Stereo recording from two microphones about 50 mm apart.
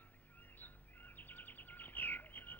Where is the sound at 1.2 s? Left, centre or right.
Left.